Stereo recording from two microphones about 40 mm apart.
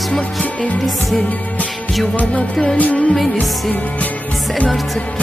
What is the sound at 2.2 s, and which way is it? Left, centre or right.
Music, left.